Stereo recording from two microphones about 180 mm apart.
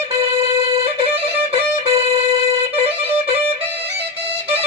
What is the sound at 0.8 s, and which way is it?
Violin, 30° right (ahead or behind).